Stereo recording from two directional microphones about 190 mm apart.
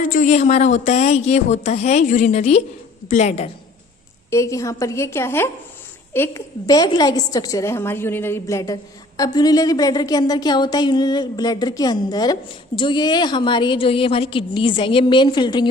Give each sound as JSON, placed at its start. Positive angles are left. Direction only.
{"t": 0.0, "sound": "speech", "side_deg": 45}
{"t": 4.3, "sound": "a woman's voice", "side_deg": 15}